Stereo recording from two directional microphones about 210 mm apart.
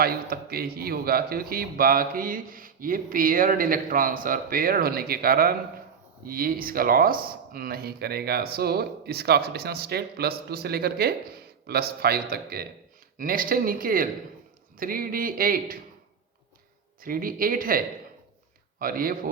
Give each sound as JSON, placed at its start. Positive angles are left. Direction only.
{"t": 0.0, "sound": "speech", "side_deg": -45}
{"t": 17.0, "sound": "speech", "side_deg": -45}